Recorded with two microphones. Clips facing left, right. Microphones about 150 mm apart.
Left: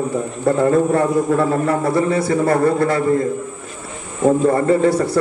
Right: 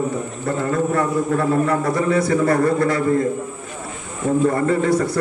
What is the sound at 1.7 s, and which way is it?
A man's voice, 30° left (ahead or behind).